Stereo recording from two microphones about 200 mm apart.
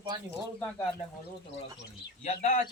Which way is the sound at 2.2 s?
35° left (ahead or behind).